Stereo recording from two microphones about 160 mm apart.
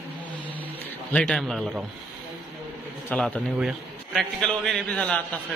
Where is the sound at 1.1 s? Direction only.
5° left (ahead or behind).